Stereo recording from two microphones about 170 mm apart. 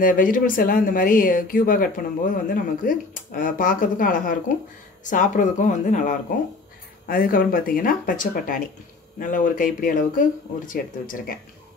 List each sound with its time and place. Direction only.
0.0 s speech: 55° left (ahead or behind)
7.1 s speech: 55° left (ahead or behind)